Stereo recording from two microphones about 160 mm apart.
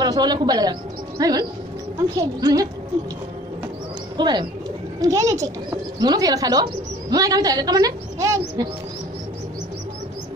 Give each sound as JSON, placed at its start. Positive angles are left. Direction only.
{"t": 0.0, "sound": "speech", "side_deg": -25}
{"t": 4.2, "sound": "a woman's voice", "side_deg": -30}